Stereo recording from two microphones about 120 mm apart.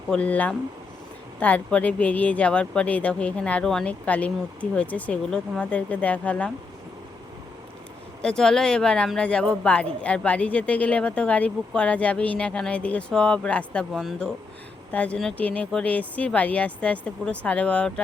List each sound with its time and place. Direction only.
0.1 s a woman's voice: 10° left (ahead or behind)
8.2 s a woman's voice: 5° left (ahead or behind)